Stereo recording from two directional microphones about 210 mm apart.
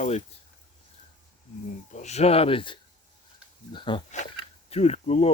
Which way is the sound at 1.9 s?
35° left (ahead or behind).